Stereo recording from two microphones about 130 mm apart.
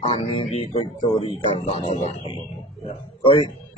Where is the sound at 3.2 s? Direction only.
45° left (ahead or behind).